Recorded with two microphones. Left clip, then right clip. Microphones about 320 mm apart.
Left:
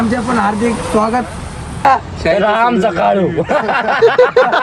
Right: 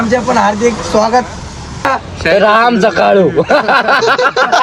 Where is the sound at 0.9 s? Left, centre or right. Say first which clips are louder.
Right 3 dB; right.